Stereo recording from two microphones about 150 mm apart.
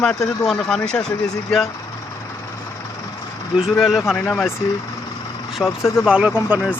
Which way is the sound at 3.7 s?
Centre (ahead or behind).